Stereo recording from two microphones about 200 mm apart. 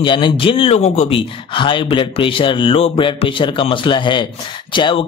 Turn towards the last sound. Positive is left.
turn(degrees=25)  # may be behind; listen again after turning